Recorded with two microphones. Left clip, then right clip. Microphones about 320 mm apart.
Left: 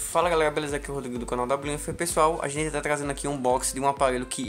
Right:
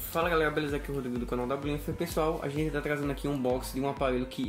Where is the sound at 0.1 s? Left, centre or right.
Centre.